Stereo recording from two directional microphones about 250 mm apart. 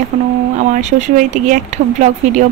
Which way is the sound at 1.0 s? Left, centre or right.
Right.